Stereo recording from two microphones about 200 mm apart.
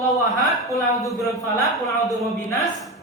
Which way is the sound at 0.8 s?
Centre (ahead or behind).